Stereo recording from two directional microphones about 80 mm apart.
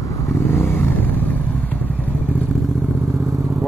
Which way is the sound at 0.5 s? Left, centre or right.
Left.